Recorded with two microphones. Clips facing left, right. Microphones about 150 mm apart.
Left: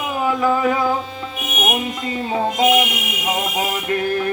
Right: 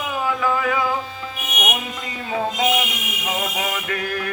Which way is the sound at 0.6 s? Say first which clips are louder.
Left 4 dB; 35° left (ahead or behind).